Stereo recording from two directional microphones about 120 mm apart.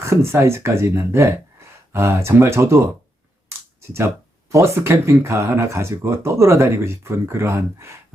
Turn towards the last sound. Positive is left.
turn(degrees=-25)  # may be behind; listen again after turning